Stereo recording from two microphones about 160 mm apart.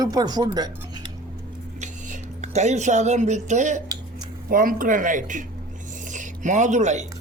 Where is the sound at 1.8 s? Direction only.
45° right (ahead or behind).